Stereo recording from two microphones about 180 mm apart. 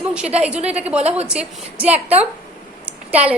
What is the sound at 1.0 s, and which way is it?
Speech, 35° right (ahead or behind).